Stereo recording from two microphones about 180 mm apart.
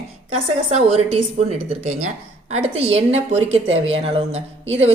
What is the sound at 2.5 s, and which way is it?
A woman's voice, 35° right (ahead or behind).